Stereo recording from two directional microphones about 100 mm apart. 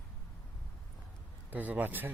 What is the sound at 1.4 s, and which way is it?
Speech, 15° right (ahead or behind).